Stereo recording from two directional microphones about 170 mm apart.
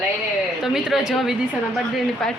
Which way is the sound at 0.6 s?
5° right (ahead or behind).